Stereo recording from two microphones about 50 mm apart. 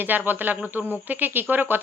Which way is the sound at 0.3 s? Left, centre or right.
Right.